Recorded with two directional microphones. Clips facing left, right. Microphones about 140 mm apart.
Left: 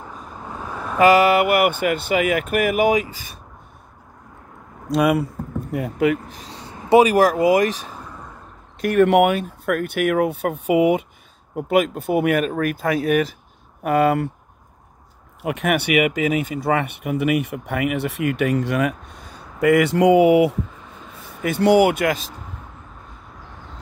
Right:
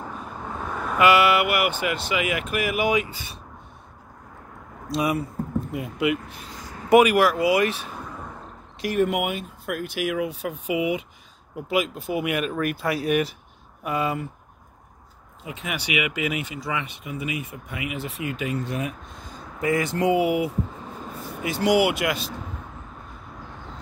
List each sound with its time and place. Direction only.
0.5 s vehicle: 5° left (ahead or behind)
0.9 s speech: 40° left (ahead or behind)
4.9 s speech: 65° left (ahead or behind)
5.7 s speech: 45° left (ahead or behind)
7.9 s a sound: 5° right (ahead or behind)
8.8 s speech: 65° left (ahead or behind)
9.7 s speech: 55° left (ahead or behind)
13.8 s speech: 60° left (ahead or behind)
15.4 s speech: 65° left (ahead or behind)
21.4 s speech: 55° left (ahead or behind)
21.7 s speech: 45° left (ahead or behind)